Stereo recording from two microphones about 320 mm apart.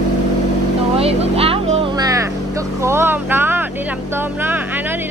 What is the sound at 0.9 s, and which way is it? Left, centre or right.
Music, centre.